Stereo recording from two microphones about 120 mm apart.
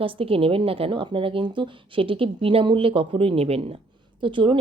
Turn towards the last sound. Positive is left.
turn(degrees=-45)  # may be behind; listen again after turning